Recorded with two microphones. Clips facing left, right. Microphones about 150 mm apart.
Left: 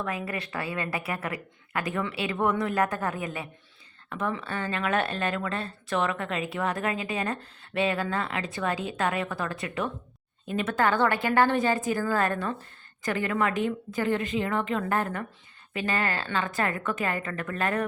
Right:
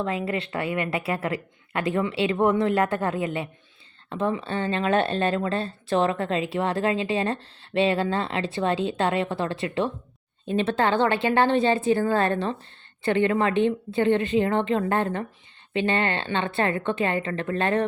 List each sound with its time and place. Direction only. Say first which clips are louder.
0.0 s speech: right 5 dB; 25° right (ahead or behind)